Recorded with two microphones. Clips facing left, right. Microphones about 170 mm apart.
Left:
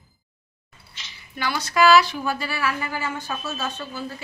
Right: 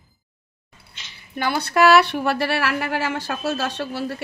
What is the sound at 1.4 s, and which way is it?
A woman's voice, 55° right (ahead or behind).